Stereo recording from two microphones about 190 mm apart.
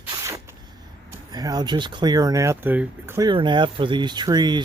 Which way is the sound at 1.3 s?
20° right (ahead or behind).